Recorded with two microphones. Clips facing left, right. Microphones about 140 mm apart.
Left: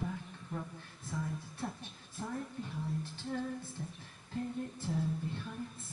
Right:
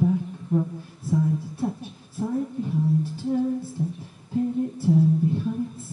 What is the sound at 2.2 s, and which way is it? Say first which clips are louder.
Female singing: right 14 dB; 10° right (ahead or behind).